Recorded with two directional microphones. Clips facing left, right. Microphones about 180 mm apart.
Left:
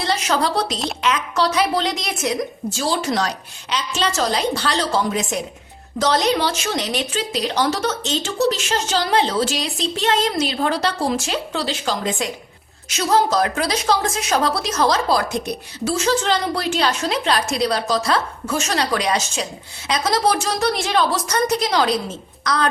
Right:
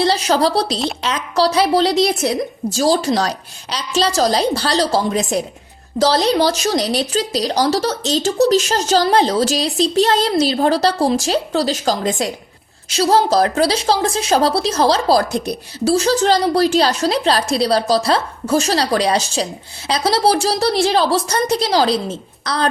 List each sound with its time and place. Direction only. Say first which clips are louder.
0.0 s a woman's voice: right 5 dB; 35° right (ahead or behind)